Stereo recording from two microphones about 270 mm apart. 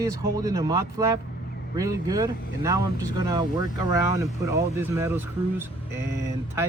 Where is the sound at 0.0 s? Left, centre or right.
Centre.